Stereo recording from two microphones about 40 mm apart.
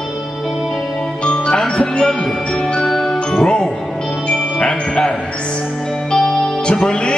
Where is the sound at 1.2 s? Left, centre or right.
Left.